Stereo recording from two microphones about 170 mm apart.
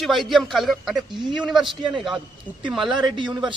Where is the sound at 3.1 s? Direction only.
25° right (ahead or behind).